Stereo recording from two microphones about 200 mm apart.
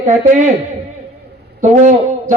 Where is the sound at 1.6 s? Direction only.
35° right (ahead or behind).